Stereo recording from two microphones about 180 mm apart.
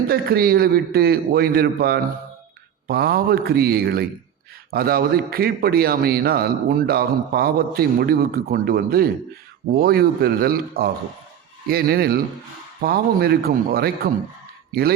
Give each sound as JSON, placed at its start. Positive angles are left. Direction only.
{"t": 0.1, "sound": "a man's voice", "side_deg": -55}